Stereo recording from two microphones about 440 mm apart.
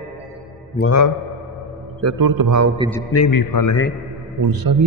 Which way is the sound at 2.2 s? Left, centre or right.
Right.